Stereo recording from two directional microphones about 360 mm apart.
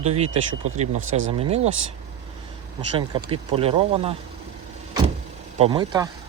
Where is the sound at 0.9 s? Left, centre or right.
Right.